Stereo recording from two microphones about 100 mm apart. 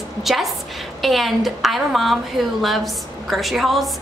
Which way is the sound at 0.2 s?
Centre (ahead or behind).